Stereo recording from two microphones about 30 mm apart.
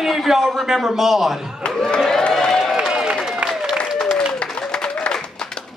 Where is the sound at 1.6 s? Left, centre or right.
Left.